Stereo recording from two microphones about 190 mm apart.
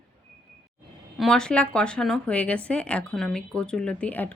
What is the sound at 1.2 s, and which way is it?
Speech, 5° left (ahead or behind).